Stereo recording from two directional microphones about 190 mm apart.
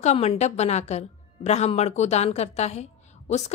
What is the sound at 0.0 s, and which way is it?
A woman's voice, 35° left (ahead or behind).